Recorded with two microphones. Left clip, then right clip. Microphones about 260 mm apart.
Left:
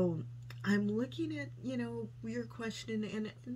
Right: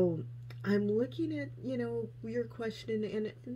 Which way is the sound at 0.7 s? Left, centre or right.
Centre.